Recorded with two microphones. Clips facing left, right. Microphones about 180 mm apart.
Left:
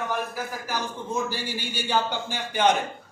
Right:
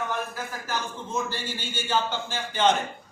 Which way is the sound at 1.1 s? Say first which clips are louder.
Left 1 dB; 15° left (ahead or behind).